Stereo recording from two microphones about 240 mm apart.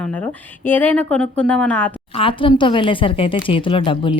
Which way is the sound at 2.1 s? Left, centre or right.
Left.